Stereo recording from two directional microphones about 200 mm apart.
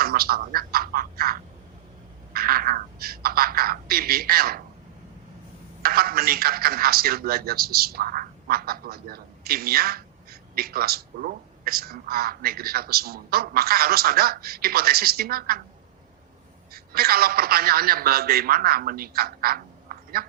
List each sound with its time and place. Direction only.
0.0 s a woman's voice: 50° right (ahead or behind)
2.3 s a sound: 50° right (ahead or behind)
5.8 s a woman's voice: 50° right (ahead or behind)
16.7 s a woman's voice: 50° right (ahead or behind)